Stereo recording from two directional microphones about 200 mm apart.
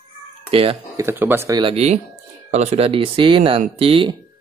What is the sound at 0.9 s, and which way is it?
Speech, 10° right (ahead or behind).